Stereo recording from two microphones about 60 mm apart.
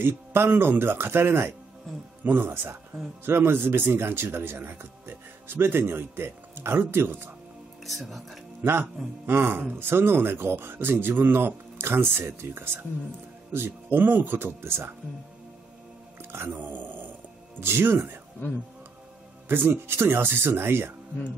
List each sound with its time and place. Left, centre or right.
0.0 s speech: right
7.8 s speech: centre
8.6 s speech: right
16.2 s speech: right
19.4 s speech: right